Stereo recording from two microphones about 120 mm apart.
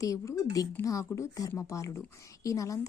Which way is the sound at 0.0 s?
25° left (ahead or behind).